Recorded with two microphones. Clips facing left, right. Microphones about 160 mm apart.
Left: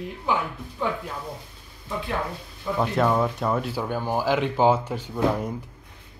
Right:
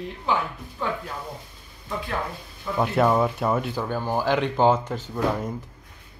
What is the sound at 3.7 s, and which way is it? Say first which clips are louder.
Speech: even; 15° left (ahead or behind).